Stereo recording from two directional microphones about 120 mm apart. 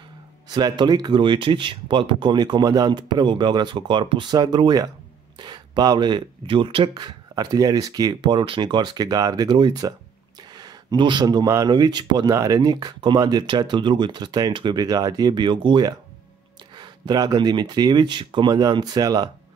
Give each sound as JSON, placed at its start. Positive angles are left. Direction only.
{"t": 0.5, "sound": "speech", "side_deg": -35}
{"t": 6.9, "sound": "speech", "side_deg": -30}